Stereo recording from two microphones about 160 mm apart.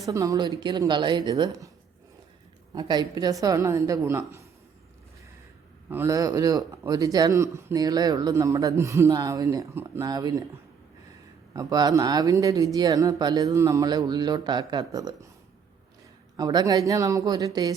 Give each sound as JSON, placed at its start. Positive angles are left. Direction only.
{"t": 0.0, "sound": "speech", "side_deg": -20}
{"t": 2.7, "sound": "speech", "side_deg": -25}
{"t": 5.9, "sound": "speech", "side_deg": -15}
{"t": 11.5, "sound": "speech", "side_deg": -25}
{"t": 16.4, "sound": "speech", "side_deg": -25}